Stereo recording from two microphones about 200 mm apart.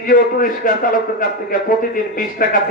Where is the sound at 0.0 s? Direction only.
45° left (ahead or behind).